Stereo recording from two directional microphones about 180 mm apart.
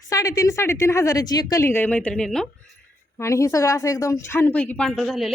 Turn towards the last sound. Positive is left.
turn(degrees=0)  # may be behind; listen again after turning